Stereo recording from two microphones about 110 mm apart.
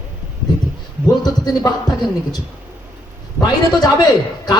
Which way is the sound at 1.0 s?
35° left (ahead or behind).